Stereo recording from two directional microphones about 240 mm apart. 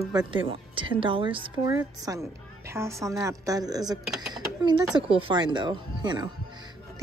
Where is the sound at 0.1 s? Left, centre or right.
Centre.